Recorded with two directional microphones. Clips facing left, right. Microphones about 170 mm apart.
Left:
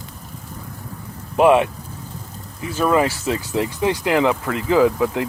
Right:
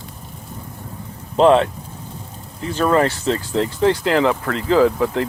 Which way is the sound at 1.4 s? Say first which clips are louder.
Right 1 dB; 10° left (ahead or behind).